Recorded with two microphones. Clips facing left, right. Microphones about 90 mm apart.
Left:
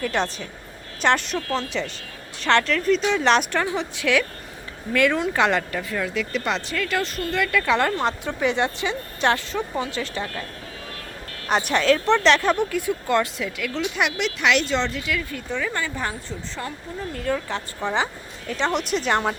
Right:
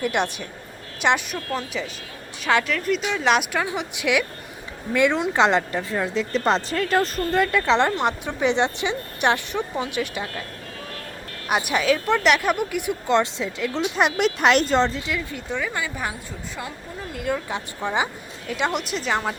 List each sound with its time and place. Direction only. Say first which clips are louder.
0.0 s a woman's voice: right 1 dB; 15° right (ahead or behind); by 7.6 s 35° right (ahead or behind)
7.6 s a woman's voice: right 1 dB; 20° right (ahead or behind)
11.4 s a woman's voice: left 2 dB; 10° right (ahead or behind); by 14.9 s 40° right (ahead or behind)
14.9 s speech: left 1 dB; 25° right (ahead or behind)
17.2 s speech: even; 10° right (ahead or behind)